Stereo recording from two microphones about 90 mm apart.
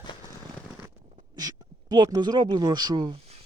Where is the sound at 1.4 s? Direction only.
45° right (ahead or behind).